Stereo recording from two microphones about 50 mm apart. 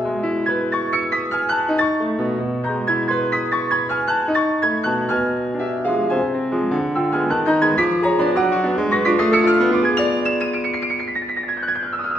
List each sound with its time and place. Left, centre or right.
4.1 s music: centre
5.9 s music: left
7.2 s music: centre